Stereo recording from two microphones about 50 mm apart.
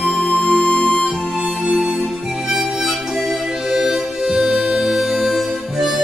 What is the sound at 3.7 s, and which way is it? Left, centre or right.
Music, centre.